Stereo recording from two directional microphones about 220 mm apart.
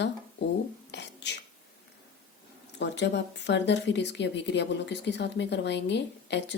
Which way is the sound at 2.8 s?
50° left (ahead or behind).